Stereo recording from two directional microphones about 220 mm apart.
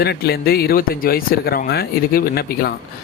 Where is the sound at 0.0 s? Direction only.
45° left (ahead or behind).